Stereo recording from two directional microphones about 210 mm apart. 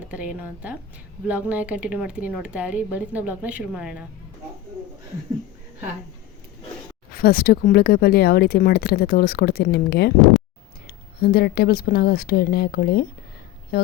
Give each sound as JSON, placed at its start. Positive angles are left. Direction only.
{"t": 0.1, "sound": "speech", "side_deg": -5}
{"t": 7.2, "sound": "speech", "side_deg": 45}